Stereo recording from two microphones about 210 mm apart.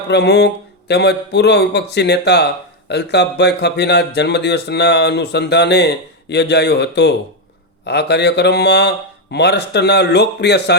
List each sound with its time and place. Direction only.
0.1 s speech: 55° left (ahead or behind)